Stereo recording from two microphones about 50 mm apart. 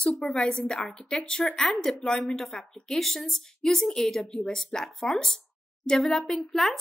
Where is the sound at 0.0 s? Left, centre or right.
Centre.